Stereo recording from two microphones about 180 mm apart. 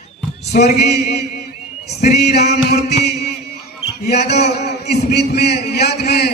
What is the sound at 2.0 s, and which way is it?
Mantra, 65° left (ahead or behind).